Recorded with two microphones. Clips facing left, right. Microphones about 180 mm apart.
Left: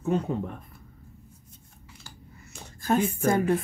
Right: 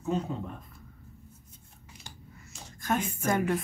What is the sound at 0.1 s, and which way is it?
Speech, 60° left (ahead or behind).